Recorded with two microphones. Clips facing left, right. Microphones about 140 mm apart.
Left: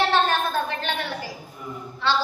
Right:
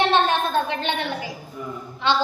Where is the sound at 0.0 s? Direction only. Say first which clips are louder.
Right 2 dB; 20° right (ahead or behind).